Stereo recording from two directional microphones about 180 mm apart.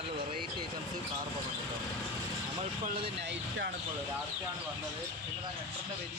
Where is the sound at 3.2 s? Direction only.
75° right (ahead or behind).